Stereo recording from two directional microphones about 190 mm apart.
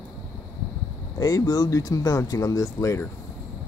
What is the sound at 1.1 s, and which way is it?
Speech, 20° left (ahead or behind).